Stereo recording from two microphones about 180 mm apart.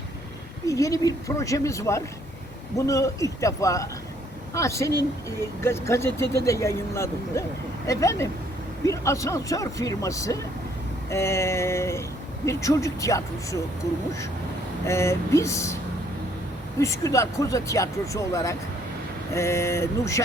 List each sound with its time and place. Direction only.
0.6 s speech: 20° left (ahead or behind)
14.8 s speech: 15° left (ahead or behind)
16.8 s speech: 15° left (ahead or behind)